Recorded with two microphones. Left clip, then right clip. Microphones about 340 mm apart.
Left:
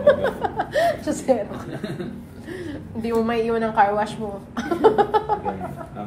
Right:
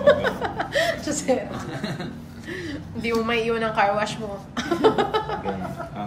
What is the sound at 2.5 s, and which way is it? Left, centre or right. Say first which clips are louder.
A woman's voice: even; centre.